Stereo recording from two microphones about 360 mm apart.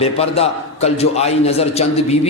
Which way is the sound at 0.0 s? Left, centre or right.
Centre.